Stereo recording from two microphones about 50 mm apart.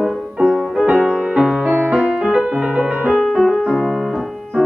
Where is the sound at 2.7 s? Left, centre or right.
Centre.